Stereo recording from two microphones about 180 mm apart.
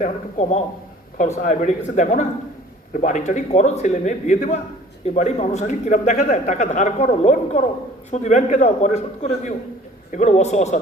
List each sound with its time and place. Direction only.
0.0 s a man's voice: 40° left (ahead or behind)